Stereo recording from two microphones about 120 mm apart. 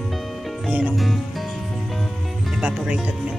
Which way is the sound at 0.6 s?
10° right (ahead or behind).